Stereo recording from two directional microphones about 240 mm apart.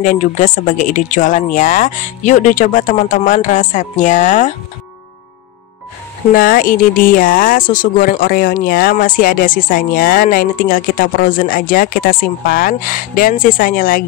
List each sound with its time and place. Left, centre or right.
0.0 s speech: left
6.3 s speech: left